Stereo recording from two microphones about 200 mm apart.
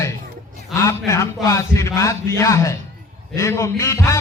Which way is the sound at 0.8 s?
15° left (ahead or behind).